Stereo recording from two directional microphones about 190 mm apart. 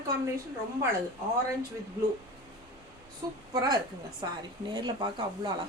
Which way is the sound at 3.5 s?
20° right (ahead or behind).